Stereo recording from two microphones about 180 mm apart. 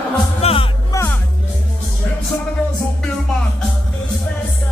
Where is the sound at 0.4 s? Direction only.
35° left (ahead or behind).